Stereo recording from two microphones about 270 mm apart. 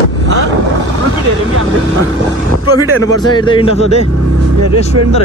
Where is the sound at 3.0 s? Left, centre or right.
Centre.